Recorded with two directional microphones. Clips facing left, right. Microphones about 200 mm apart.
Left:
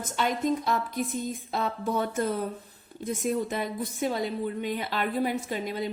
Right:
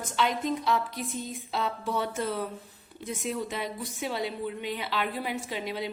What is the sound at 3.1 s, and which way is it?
Speech, 45° left (ahead or behind).